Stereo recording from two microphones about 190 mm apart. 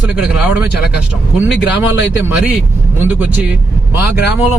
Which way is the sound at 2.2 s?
5° right (ahead or behind).